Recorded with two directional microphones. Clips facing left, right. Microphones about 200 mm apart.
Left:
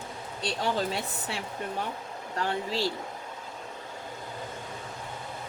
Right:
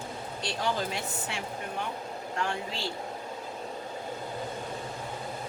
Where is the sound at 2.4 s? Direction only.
35° left (ahead or behind).